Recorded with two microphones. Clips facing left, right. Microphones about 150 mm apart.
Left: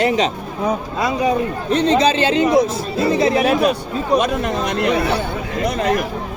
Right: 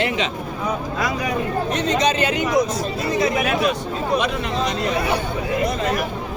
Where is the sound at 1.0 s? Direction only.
25° left (ahead or behind).